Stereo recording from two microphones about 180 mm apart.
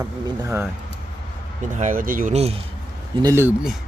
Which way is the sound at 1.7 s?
45° right (ahead or behind).